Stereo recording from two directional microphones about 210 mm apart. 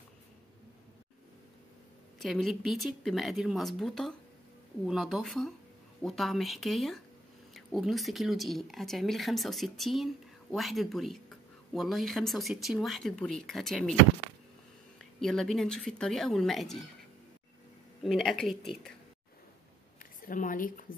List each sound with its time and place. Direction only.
2.1 s speech: centre (ahead or behind)
15.0 s speech: centre (ahead or behind)
18.0 s speech: centre (ahead or behind)
20.0 s a woman's voice: 40° left (ahead or behind)